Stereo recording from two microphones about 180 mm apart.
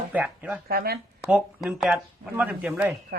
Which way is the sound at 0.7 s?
60° right (ahead or behind).